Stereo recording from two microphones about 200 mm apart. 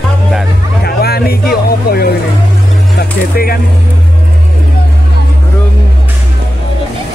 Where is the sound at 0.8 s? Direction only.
50° left (ahead or behind).